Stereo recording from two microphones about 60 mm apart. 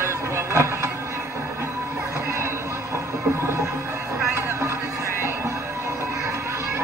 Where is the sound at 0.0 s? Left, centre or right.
Right.